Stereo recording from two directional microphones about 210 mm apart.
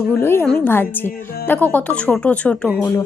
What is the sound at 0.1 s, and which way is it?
Speech, 10° left (ahead or behind).